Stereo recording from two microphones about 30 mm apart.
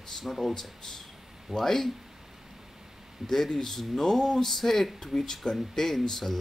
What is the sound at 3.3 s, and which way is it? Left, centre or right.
Speech, centre.